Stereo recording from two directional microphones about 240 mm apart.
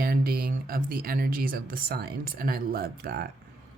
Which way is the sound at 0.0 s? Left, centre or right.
Right.